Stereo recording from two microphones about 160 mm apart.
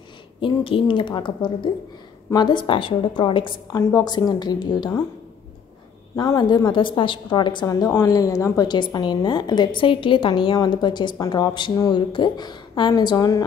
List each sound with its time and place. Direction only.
0.4 s a woman's voice: 35° left (ahead or behind)
6.1 s a woman's voice: 25° left (ahead or behind)